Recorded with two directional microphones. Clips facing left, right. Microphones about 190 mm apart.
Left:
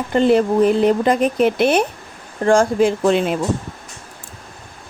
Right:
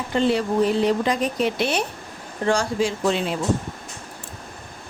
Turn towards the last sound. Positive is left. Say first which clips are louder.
# left 6 dB
turn(degrees=55)  # may be behind; listen again after turning